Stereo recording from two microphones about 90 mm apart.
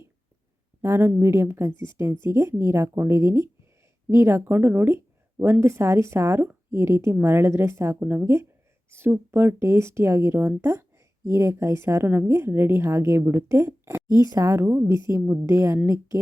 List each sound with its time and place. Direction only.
0.8 s a woman's voice: 30° right (ahead or behind)
14.1 s speech: 40° right (ahead or behind)